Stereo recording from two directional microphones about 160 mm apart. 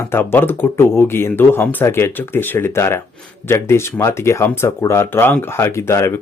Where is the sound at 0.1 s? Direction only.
15° left (ahead or behind).